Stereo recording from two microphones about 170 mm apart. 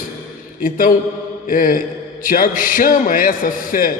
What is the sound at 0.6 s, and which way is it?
A man's voice, 55° left (ahead or behind).